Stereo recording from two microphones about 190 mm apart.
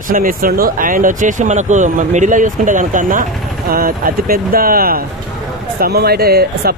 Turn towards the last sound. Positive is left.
turn(degrees=-55)  # may be behind; listen again after turning